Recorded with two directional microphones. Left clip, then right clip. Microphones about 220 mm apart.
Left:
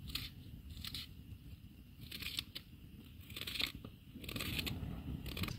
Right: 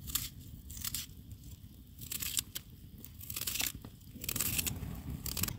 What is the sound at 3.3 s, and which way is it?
Crunch, 10° right (ahead or behind).